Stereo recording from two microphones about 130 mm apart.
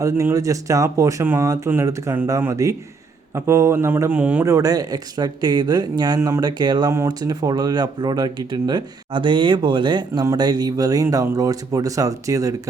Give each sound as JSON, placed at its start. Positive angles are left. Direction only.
{"t": 0.0, "sound": "speech", "side_deg": -25}
{"t": 4.4, "sound": "speech", "side_deg": -25}
{"t": 6.1, "sound": "speech", "side_deg": -20}
{"t": 6.4, "sound": "speech", "side_deg": -35}